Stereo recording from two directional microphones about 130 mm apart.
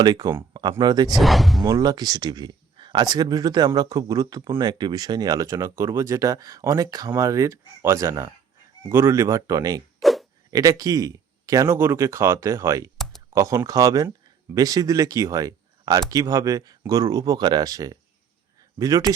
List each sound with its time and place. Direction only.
0.0 s speech: 30° right (ahead or behind)
1.1 s speech: centre (ahead or behind)
1.6 s speech: 30° right (ahead or behind)
10.0 s zipper: centre (ahead or behind)
10.5 s speech: 25° right (ahead or behind)